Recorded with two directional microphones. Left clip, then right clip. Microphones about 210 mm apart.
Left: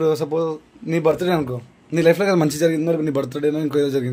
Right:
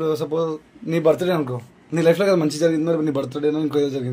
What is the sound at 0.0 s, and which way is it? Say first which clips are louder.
Speech: left 3 dB; 30° left (ahead or behind).